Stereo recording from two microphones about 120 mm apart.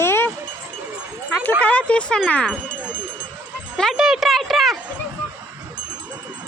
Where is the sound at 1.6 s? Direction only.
10° left (ahead or behind).